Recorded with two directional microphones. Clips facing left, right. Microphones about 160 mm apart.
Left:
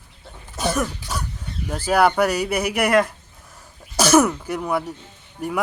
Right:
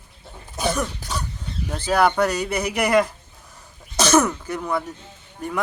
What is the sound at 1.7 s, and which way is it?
Speech, 10° left (ahead or behind).